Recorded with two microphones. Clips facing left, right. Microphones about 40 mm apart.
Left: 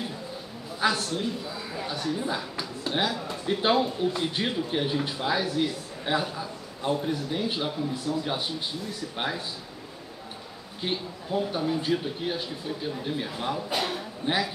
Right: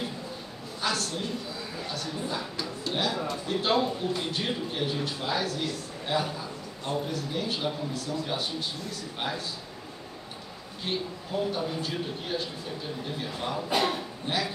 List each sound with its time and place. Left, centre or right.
0.7 s a man's voice: centre
10.9 s a man's voice: centre
13.7 s speech: centre
14.2 s a man's voice: centre